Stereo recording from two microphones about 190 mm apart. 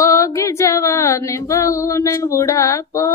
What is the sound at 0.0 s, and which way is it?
Female singing, 15° left (ahead or behind).